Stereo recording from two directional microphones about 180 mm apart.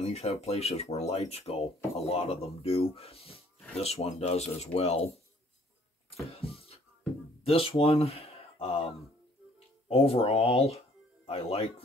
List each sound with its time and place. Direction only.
0.0 s speech: 35° left (ahead or behind)
6.3 s a sound: 35° left (ahead or behind)
7.4 s speech: 30° left (ahead or behind)